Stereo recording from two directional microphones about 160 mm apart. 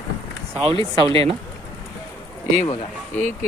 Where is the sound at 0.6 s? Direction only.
35° right (ahead or behind).